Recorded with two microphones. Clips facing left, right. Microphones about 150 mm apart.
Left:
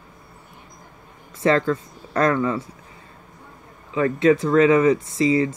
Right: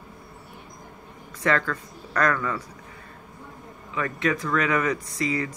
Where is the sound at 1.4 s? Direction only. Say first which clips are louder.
Left 6 dB; 25° left (ahead or behind).